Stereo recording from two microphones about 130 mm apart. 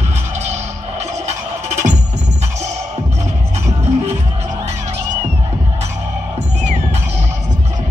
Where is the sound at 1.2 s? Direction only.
60° right (ahead or behind).